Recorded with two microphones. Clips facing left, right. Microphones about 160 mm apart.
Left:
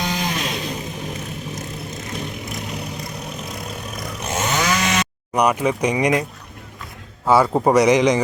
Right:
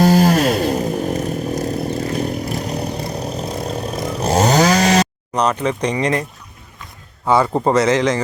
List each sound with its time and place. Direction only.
0.0 s chainsaw: 40° right (ahead or behind)
1.9 s vehicle: 35° right (ahead or behind)
5.3 s speech: 10° left (ahead or behind)
7.3 s a man's voice: 5° left (ahead or behind)
7.7 s speech: 15° left (ahead or behind)